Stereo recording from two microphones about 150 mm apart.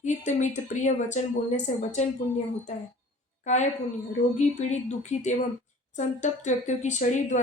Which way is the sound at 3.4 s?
50° left (ahead or behind).